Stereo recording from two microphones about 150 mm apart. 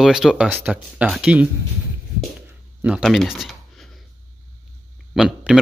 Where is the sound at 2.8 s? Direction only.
5° right (ahead or behind).